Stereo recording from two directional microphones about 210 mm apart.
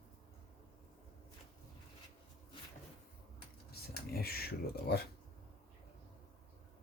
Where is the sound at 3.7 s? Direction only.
45° left (ahead or behind).